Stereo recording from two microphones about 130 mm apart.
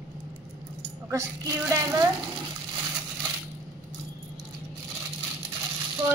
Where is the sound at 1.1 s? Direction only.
25° right (ahead or behind).